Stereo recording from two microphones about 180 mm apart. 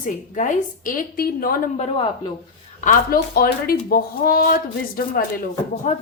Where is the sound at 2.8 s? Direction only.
50° left (ahead or behind).